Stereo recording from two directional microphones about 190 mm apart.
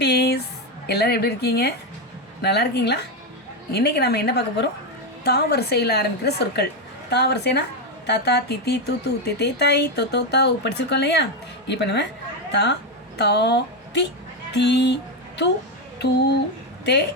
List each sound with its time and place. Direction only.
0.0 s music: 60° left (ahead or behind)
0.9 s speech: 60° left (ahead or behind)
16.0 s speech: 60° left (ahead or behind)